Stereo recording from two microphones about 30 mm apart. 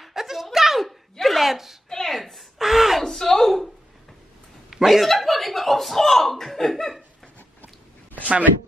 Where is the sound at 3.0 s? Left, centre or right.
Centre.